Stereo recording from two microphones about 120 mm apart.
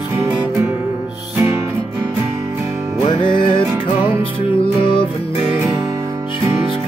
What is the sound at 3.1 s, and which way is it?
Music, 45° left (ahead or behind).